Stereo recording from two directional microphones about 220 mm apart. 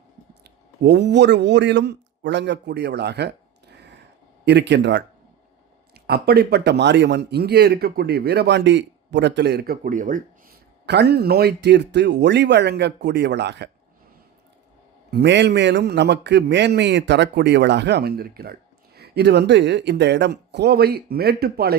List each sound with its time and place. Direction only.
0.4 s a man's voice: 50° right (ahead or behind)
10.8 s a man's voice: 50° right (ahead or behind)
15.1 s a man's voice: 50° right (ahead or behind)